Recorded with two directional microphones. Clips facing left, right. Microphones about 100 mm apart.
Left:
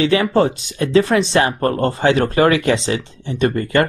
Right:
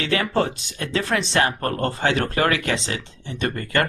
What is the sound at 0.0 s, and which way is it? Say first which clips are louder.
Speech: left 7 dB; 15° left (ahead or behind).